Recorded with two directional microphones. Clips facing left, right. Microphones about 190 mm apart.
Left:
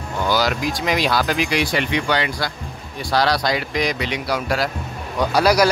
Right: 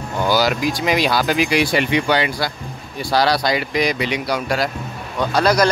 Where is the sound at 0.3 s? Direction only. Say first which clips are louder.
Right 2 dB; 5° right (ahead or behind).